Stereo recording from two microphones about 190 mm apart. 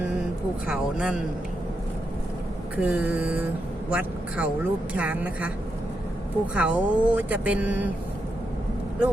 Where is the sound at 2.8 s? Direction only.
5° right (ahead or behind).